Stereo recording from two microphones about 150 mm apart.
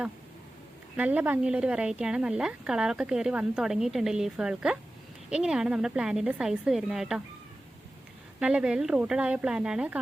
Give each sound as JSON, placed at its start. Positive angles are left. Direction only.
{"t": 0.9, "sound": "a woman's voice", "side_deg": -10}
{"t": 8.4, "sound": "a woman's voice", "side_deg": -5}